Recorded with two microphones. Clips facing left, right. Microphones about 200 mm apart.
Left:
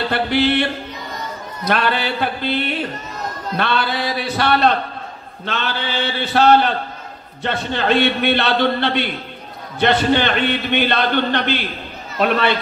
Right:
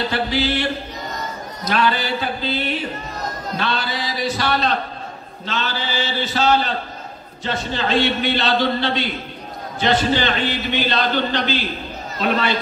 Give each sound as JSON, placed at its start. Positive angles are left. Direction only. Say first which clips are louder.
{"t": 0.1, "sound": "a man's voice", "louder": "left 4 dB", "side_deg": 60}